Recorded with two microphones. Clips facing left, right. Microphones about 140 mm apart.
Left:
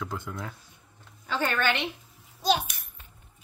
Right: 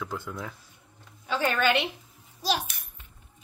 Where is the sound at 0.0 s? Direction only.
Centre (ahead or behind).